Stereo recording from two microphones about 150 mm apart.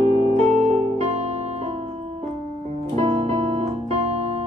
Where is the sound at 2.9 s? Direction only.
40° right (ahead or behind).